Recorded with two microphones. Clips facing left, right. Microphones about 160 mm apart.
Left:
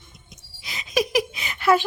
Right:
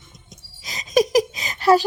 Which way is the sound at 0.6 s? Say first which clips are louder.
Right 6 dB; 40° right (ahead or behind).